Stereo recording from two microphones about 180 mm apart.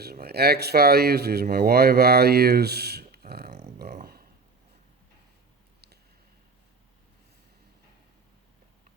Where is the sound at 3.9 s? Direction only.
55° right (ahead or behind).